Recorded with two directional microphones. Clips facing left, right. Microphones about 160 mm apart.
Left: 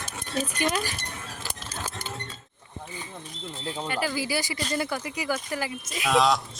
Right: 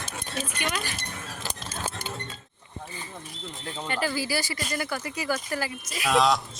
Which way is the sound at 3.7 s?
10° left (ahead or behind).